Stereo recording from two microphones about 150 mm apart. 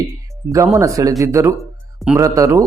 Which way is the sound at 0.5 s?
20° right (ahead or behind).